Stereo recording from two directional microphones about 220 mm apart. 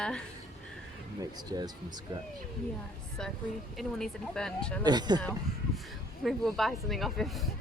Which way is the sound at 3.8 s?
5° left (ahead or behind).